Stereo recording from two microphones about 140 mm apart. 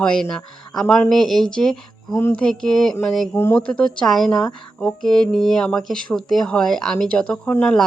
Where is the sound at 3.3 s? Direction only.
15° left (ahead or behind).